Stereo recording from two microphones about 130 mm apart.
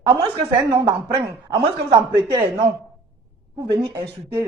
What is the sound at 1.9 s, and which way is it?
Speech, 25° right (ahead or behind).